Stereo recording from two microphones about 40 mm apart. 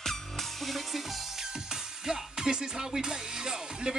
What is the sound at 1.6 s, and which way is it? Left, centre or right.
Music, centre.